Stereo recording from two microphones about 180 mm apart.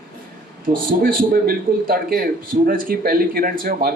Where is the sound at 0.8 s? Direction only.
50° right (ahead or behind).